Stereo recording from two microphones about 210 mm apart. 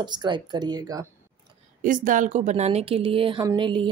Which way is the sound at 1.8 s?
40° right (ahead or behind).